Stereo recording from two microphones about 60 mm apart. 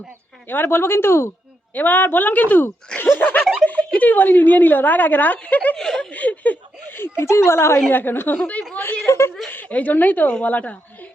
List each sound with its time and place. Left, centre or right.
0.4 s speech: left
1.7 s speech: left
3.2 s snicker: left
3.7 s a woman's voice: left
5.7 s snicker: centre; by 7.8 s left
7.9 s speech: left
8.7 s a sound: left
9.5 s a woman's voice: left